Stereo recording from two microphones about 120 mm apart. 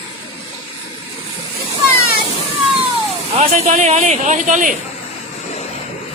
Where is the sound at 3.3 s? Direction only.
65° right (ahead or behind); by 4.7 s 90° right.